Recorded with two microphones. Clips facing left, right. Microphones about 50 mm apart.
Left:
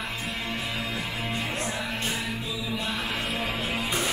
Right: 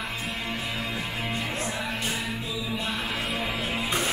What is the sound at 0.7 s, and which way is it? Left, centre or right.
Music, right.